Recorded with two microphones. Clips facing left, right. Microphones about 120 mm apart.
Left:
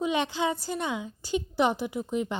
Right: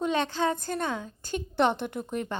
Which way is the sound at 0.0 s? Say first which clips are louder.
Even; 15° left (ahead or behind).